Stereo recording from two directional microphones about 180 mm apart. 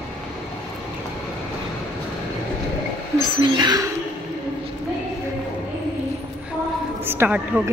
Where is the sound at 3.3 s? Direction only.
25° right (ahead or behind).